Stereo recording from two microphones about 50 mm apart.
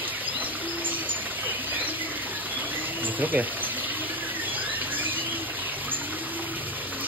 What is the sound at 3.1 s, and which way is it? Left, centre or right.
Speech, right.